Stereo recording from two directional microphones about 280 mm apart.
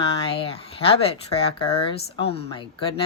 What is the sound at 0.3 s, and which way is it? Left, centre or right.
Speech, centre.